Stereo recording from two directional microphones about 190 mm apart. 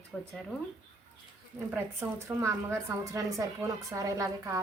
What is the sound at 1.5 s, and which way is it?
A woman's voice, 10° right (ahead or behind).